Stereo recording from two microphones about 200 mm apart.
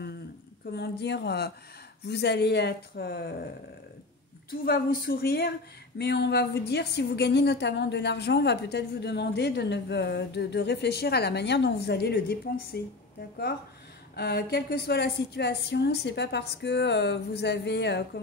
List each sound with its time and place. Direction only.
0.7 s a woman's voice: 55° left (ahead or behind)
4.5 s a woman's voice: 50° left (ahead or behind)
14.1 s a woman's voice: 55° left (ahead or behind)